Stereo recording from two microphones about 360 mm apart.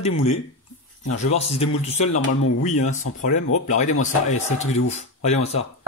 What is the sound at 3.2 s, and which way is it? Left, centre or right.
Speech, left.